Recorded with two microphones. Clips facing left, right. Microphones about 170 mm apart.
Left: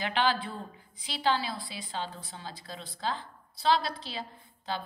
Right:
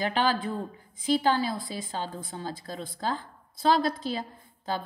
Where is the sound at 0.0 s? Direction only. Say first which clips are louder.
Right 3 dB; 40° right (ahead or behind).